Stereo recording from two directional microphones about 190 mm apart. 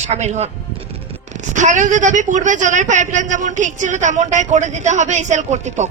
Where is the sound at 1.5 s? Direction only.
40° right (ahead or behind).